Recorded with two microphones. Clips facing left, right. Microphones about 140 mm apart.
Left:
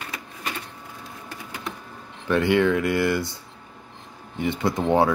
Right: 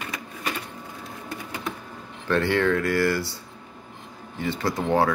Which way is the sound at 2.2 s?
15° left (ahead or behind).